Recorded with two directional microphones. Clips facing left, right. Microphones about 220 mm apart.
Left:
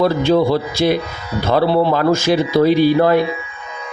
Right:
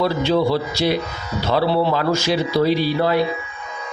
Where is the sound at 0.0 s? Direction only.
50° left (ahead or behind).